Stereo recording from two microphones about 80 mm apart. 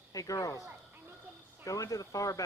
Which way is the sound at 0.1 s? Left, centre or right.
Left.